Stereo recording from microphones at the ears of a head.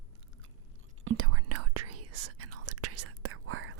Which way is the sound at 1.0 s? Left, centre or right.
Right.